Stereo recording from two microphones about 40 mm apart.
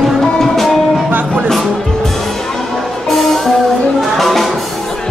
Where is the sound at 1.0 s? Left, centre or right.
Right.